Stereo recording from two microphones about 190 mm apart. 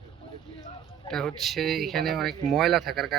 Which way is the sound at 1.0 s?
Centre (ahead or behind).